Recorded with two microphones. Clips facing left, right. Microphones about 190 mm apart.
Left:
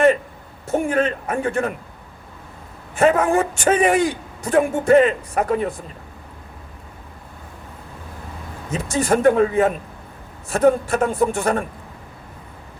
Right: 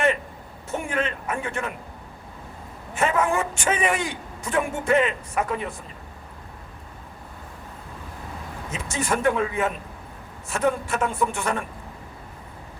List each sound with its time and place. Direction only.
0.7 s a man's voice: 35° left (ahead or behind)
2.9 s a man's voice: 35° left (ahead or behind)
8.7 s a man's voice: 35° left (ahead or behind)